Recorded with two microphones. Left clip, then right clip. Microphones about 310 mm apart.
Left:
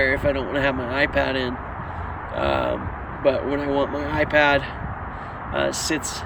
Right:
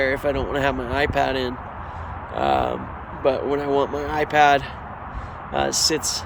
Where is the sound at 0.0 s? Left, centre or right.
Centre.